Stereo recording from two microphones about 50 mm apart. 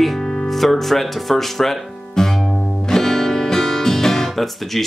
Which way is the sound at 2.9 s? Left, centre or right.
Centre.